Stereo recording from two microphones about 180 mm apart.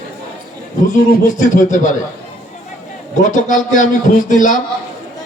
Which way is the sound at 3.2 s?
45° left (ahead or behind).